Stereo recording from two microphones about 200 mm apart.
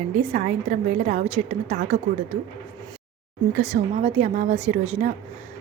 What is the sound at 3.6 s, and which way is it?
A woman's voice, 35° right (ahead or behind).